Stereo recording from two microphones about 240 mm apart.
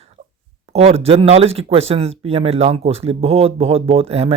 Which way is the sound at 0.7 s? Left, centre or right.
Right.